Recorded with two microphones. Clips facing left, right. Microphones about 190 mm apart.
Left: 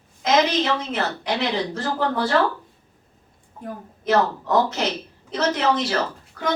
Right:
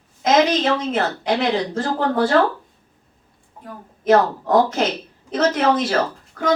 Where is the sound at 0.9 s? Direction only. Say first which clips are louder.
Right 4 dB; 50° right (ahead or behind).